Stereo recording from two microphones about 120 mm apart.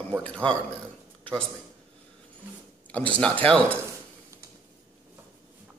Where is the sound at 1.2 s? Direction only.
5° left (ahead or behind).